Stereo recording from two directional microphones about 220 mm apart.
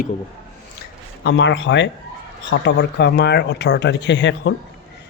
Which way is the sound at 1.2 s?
50° left (ahead or behind).